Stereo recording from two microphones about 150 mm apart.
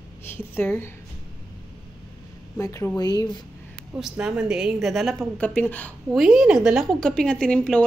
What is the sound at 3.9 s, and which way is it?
A woman's voice, 5° right (ahead or behind).